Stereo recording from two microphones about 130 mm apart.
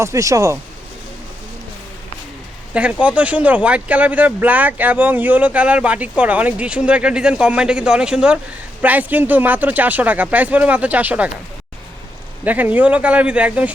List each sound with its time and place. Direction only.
0.0 s speech: 25° right (ahead or behind)
2.7 s speech: 10° right (ahead or behind)
12.5 s speech: 10° right (ahead or behind)